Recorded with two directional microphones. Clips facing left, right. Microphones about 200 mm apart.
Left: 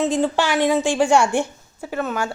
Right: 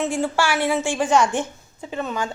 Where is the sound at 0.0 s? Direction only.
20° left (ahead or behind).